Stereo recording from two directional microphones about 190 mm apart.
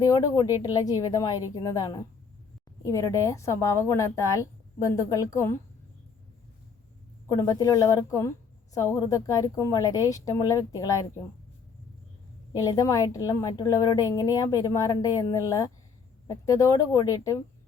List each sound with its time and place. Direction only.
0.0 s a woman's voice: 20° left (ahead or behind)
7.3 s a woman's voice: 20° left (ahead or behind)
12.5 s a woman's voice: 20° left (ahead or behind)